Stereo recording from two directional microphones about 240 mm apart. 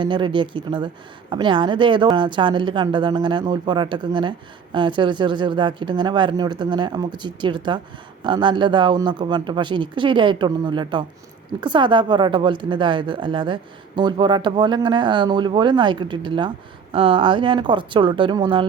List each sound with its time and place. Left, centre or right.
0.0 s a woman's voice: centre